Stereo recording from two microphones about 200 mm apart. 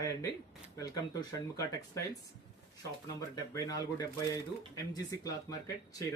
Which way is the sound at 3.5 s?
20° left (ahead or behind).